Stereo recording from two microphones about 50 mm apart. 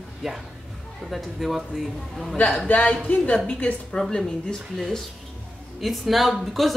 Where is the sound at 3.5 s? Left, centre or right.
Centre.